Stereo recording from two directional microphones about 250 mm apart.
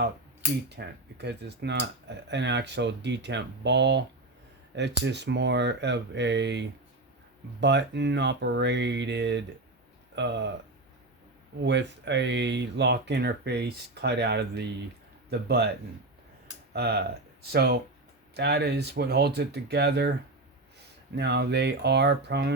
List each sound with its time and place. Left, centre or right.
0.8 s speech: right
11.6 s speech: right
16.7 s speech: right
21.2 s speech: right